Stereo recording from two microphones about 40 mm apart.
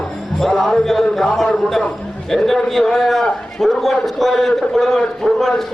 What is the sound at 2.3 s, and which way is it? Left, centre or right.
A man's voice, centre.